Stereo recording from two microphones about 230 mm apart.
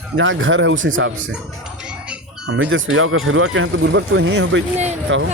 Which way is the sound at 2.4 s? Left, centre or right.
Right.